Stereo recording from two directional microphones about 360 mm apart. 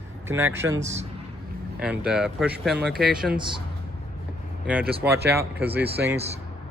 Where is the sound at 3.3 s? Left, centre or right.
Centre.